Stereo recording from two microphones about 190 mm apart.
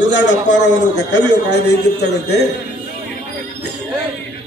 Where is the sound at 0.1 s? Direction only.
70° left (ahead or behind).